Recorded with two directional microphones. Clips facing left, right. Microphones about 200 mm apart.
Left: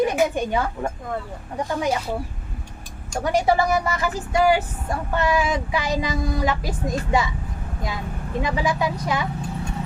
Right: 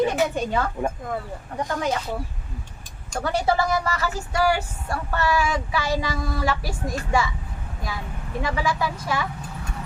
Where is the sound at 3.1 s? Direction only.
15° left (ahead or behind).